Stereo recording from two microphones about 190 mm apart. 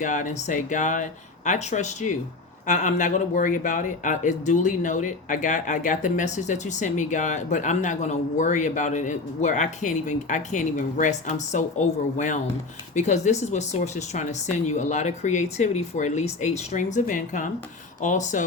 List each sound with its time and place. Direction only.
0.0 s speech: 40° left (ahead or behind)